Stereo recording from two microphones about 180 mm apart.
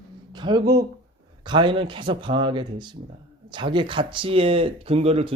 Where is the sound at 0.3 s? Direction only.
25° right (ahead or behind).